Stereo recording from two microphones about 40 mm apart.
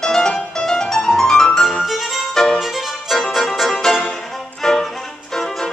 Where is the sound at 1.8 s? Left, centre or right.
Centre.